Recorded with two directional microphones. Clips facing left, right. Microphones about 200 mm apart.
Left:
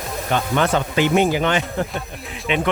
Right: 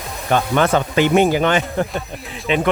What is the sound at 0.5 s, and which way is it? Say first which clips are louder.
Speech: right 2 dB; 55° right (ahead or behind).